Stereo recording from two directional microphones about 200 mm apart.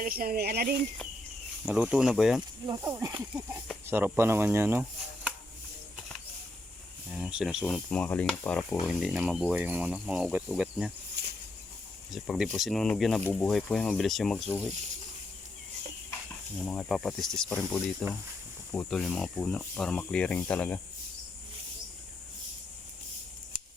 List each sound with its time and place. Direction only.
0.0 s speech: 50° right (ahead or behind)
1.6 s speech: 5° right (ahead or behind)
2.6 s speech: 20° right (ahead or behind)
7.1 s speech: 5° right (ahead or behind)
12.1 s speech: centre (ahead or behind)
16.6 s speech: centre (ahead or behind)